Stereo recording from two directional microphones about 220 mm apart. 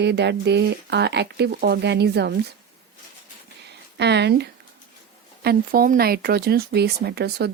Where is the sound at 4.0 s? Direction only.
50° right (ahead or behind).